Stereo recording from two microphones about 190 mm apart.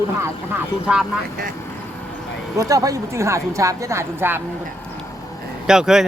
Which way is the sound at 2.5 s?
20° right (ahead or behind).